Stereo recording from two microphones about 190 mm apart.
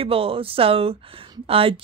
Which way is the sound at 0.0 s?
30° right (ahead or behind).